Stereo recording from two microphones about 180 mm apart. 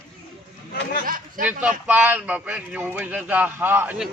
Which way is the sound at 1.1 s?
50° right (ahead or behind).